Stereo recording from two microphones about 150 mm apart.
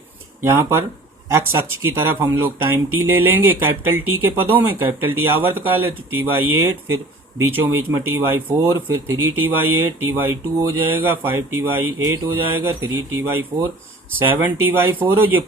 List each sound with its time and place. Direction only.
0.5 s speech: 15° right (ahead or behind)